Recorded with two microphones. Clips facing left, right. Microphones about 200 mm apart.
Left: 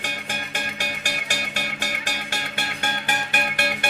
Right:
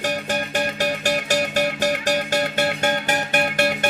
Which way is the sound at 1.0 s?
45° right (ahead or behind).